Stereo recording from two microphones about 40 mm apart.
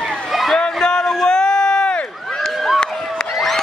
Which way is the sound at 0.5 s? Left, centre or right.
Centre.